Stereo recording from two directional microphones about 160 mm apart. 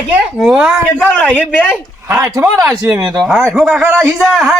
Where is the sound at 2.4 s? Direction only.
10° right (ahead or behind).